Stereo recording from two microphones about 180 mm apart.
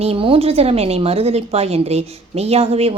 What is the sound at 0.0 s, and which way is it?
A woman's voice, 30° right (ahead or behind).